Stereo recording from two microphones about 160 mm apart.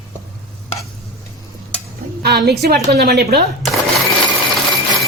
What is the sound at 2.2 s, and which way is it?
A woman's voice, 90° right.